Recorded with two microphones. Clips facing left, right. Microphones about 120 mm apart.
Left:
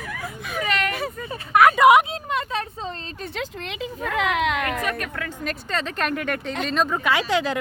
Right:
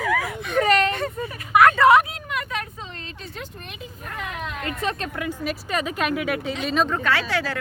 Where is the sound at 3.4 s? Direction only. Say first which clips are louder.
Left 9 dB; 90° left.